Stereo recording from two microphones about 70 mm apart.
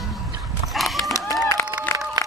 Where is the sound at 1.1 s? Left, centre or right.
Left.